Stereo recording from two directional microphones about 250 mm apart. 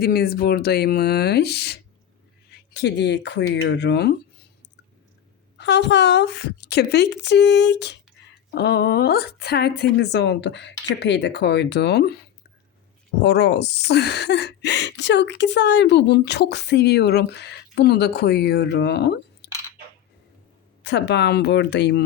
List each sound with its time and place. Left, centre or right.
0.0 s a woman's voice: left
5.5 s a woman's voice: left
13.2 s a woman's voice: left
20.8 s a woman's voice: left